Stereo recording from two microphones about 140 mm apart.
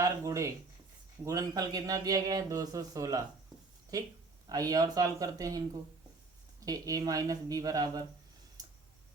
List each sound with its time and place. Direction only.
0.0 s speech: 20° right (ahead or behind)
6.7 s speech: 25° right (ahead or behind)